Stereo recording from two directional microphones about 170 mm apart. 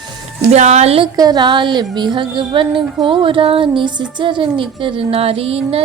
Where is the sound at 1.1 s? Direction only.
25° right (ahead or behind).